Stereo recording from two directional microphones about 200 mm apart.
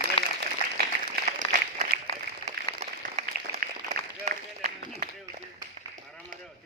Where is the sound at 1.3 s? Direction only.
35° right (ahead or behind).